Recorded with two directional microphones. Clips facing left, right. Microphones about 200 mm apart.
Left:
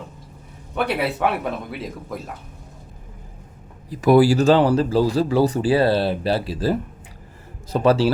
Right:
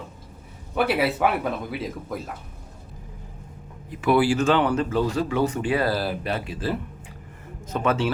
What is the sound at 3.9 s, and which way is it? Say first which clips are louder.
Speech: left 6 dB; 40° left (ahead or behind).